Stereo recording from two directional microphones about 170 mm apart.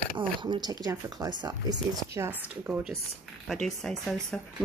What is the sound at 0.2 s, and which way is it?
Speech, 30° right (ahead or behind).